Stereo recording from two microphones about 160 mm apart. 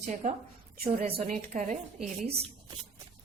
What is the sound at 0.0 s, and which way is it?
Speech, 45° right (ahead or behind).